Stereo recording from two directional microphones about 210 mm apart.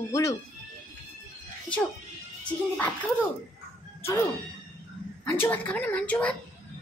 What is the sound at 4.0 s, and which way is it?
Speech, 10° left (ahead or behind).